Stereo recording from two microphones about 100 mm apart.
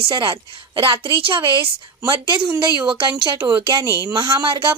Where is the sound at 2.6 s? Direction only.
55° right (ahead or behind).